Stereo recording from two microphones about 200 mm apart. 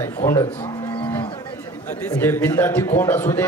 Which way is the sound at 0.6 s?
25° left (ahead or behind).